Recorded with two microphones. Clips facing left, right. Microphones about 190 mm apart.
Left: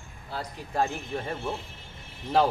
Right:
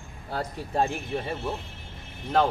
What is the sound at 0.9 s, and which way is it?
Speech, 10° right (ahead or behind).